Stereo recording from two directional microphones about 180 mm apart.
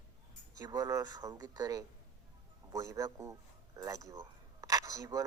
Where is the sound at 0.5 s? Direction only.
20° right (ahead or behind).